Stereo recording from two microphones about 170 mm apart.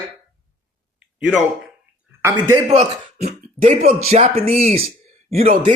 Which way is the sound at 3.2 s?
55° right (ahead or behind).